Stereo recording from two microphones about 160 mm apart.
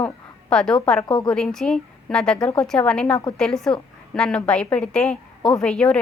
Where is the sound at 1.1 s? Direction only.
30° left (ahead or behind).